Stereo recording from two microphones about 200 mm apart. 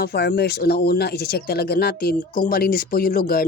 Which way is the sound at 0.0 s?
55° left (ahead or behind).